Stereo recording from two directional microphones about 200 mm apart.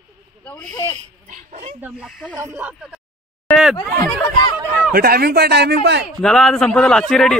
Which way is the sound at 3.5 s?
10° left (ahead or behind).